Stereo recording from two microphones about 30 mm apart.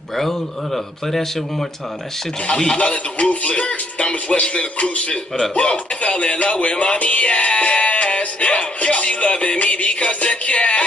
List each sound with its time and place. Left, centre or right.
0.1 s a man's voice: centre
2.4 s speech: left
2.8 s music: left
5.5 s speech: left
8.5 s music: left